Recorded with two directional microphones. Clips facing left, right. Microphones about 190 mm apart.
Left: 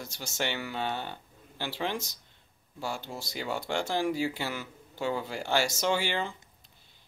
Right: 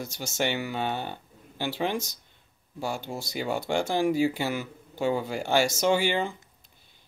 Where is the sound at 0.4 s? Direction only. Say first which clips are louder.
Right 4 dB; 15° right (ahead or behind).